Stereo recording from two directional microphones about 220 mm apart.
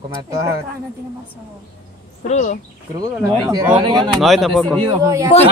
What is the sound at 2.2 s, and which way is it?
Speech, 30° left (ahead or behind).